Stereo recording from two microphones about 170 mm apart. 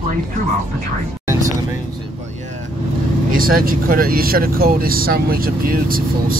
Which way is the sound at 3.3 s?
55° right (ahead or behind).